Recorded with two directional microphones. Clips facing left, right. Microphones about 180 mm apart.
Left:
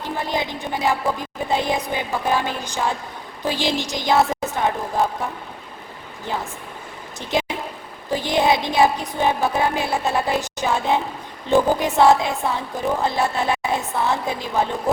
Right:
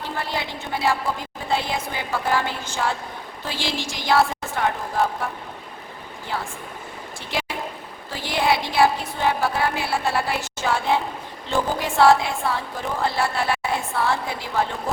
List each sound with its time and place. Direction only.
0.0 s music: 15° left (ahead or behind)
6.2 s music: 20° left (ahead or behind)
8.1 s music: 20° left (ahead or behind)